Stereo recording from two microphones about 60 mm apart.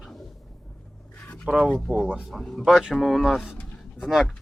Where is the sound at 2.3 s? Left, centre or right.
Centre.